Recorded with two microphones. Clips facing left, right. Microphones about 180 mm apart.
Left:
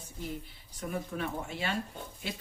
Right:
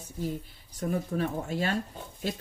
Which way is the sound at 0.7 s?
40° right (ahead or behind).